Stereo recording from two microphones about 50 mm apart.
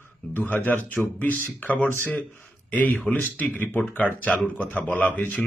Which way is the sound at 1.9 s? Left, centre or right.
Left.